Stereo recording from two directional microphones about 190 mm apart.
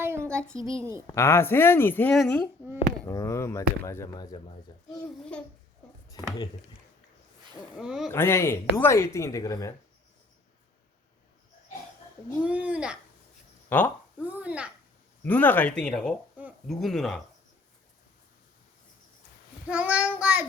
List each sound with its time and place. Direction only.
0.0 s child singing: 15° right (ahead or behind)
1.0 s speech: 15° left (ahead or behind)
3.0 s speech: 15° left (ahead or behind)
5.3 s speech: 5° left (ahead or behind)
6.1 s speech: 20° left (ahead or behind)
7.8 s speech: 5° right (ahead or behind)
8.1 s speech: 15° left (ahead or behind)
12.5 s child singing: 5° right (ahead or behind)
13.7 s speech: 10° left (ahead or behind)
14.2 s child singing: 10° right (ahead or behind)
15.2 s speech: 10° left (ahead or behind)
19.6 s child singing: 5° right (ahead or behind)